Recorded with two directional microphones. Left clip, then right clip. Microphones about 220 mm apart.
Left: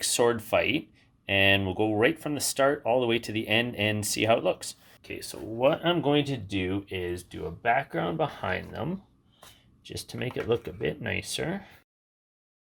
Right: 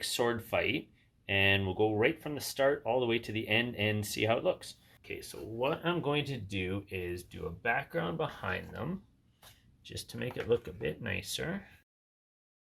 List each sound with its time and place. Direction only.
0.0 s speech: 30° left (ahead or behind)
5.0 s speech: 50° left (ahead or behind); by 11.7 s 35° left (ahead or behind)